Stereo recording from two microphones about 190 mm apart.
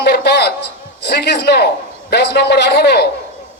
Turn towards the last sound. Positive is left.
turn(degrees=60)  # may be behind; listen again after turning